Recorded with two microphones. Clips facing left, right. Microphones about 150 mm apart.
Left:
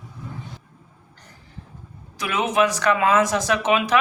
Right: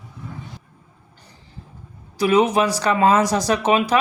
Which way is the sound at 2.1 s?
35° right (ahead or behind).